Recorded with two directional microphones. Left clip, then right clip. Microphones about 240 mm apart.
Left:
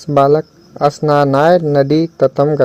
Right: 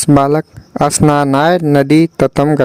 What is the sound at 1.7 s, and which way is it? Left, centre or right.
Speech, right.